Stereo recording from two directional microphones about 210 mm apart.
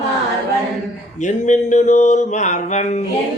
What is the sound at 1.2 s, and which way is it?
Mantra, 35° left (ahead or behind).